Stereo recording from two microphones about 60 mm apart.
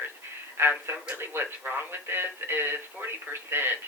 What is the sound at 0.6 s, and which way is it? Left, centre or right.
Speech, right.